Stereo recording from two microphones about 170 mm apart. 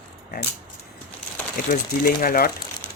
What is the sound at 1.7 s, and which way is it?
Speech, 55° left (ahead or behind).